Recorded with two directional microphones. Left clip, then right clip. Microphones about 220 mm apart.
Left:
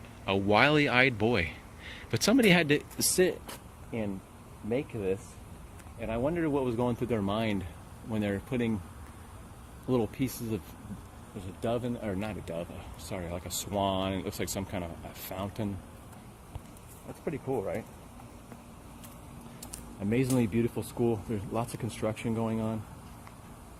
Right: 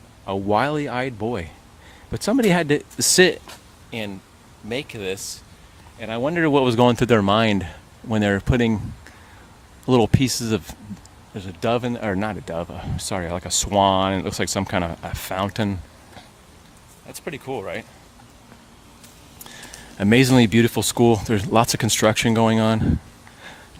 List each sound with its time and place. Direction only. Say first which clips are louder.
0.3 s speech: right 4 dB; 25° right (ahead or behind)
4.7 s speech: right 4 dB; 25° right (ahead or behind)
6.0 s speech: right 9 dB; 45° right (ahead or behind)
9.8 s speech: right 12 dB; 35° right (ahead or behind)
11.6 s speech: right 10 dB; 35° right (ahead or behind)
17.2 s speech: right 4 dB; 30° right (ahead or behind)
20.0 s speech: right 13 dB; 40° right (ahead or behind)